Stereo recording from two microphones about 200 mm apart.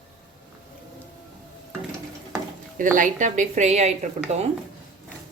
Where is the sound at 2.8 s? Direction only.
40° right (ahead or behind).